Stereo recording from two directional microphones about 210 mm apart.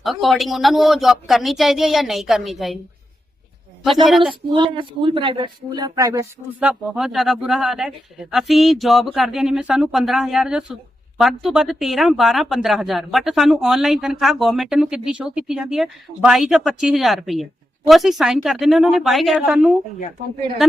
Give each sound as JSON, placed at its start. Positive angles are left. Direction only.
{"t": 0.0, "sound": "a man's voice", "side_deg": 0}
{"t": 4.5, "sound": "speech", "side_deg": -25}
{"t": 6.7, "sound": "a man's voice", "side_deg": 0}